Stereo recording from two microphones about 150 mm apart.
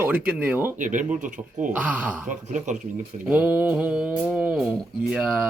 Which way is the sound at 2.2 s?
55° right (ahead or behind).